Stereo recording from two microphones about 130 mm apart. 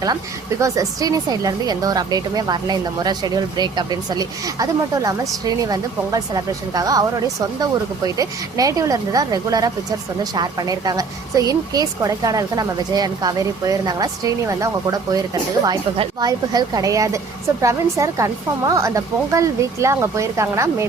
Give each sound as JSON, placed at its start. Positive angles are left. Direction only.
{"t": 0.6, "sound": "a woman's voice", "side_deg": -25}
{"t": 16.2, "sound": "a woman's voice", "side_deg": -30}